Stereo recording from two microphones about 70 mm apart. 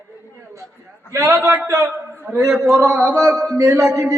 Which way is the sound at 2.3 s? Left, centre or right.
Right.